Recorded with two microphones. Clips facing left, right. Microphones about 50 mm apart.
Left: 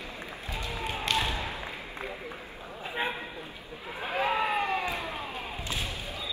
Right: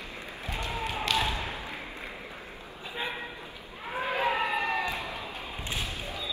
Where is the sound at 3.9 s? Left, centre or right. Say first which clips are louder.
Right 1 dB; right.